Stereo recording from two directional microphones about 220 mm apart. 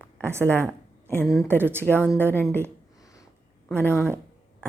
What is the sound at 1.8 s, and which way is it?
Speech, 10° left (ahead or behind).